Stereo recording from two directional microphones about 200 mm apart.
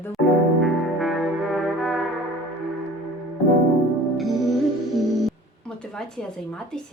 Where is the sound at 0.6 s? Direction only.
Centre (ahead or behind).